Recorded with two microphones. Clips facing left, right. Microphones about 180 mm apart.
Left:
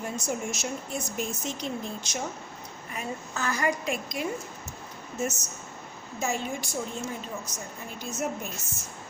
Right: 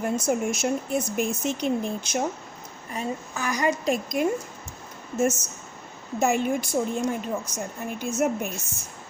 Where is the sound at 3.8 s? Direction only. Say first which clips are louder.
Right 7 dB; 45° right (ahead or behind).